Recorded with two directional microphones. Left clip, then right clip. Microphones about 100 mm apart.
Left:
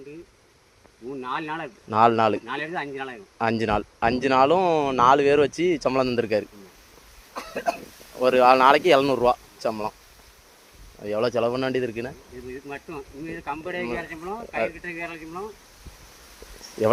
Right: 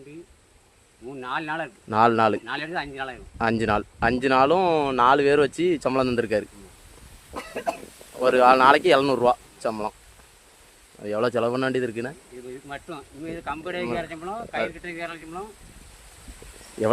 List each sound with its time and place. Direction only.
1.2 s speech: 30° right (ahead or behind)
1.9 s speech: 40° right (ahead or behind)
2.5 s speech: 15° right (ahead or behind)
3.3 s speech: 40° right (ahead or behind)
7.3 s a sound: 20° left (ahead or behind)
8.2 s speech: 30° right (ahead or behind)
11.0 s speech: 30° right (ahead or behind)
12.6 s speech: 20° right (ahead or behind)